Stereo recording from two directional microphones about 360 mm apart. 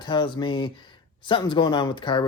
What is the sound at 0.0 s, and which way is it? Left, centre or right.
Speech, centre.